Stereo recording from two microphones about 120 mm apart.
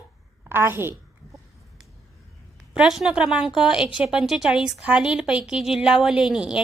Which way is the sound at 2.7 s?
5° right (ahead or behind).